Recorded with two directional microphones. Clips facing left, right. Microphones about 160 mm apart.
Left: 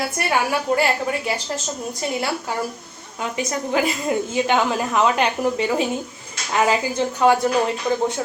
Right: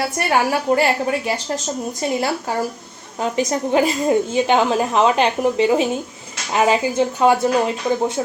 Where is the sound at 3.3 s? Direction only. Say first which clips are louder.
Right 4 dB; 25° right (ahead or behind).